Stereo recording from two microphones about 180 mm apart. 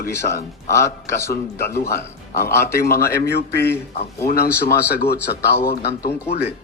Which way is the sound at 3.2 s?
65° left (ahead or behind).